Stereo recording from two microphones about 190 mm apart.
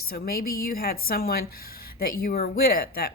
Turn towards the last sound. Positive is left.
turn(degrees=50)  # may be behind; listen again after turning